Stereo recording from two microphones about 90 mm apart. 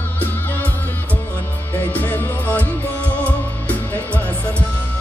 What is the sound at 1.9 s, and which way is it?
Music, 20° left (ahead or behind).